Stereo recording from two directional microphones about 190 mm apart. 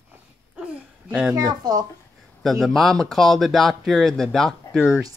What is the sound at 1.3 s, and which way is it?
Speech, 20° right (ahead or behind).